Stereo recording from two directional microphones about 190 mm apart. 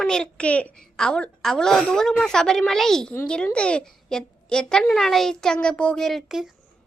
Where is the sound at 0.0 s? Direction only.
5° left (ahead or behind).